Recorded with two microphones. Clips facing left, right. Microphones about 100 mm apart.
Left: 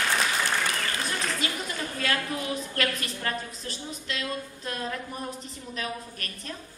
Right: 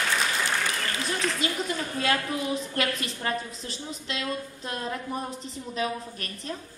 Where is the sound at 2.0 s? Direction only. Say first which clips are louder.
Right 2 dB; 25° right (ahead or behind).